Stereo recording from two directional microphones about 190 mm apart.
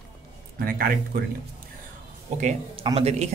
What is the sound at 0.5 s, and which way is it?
Speech, 50° right (ahead or behind).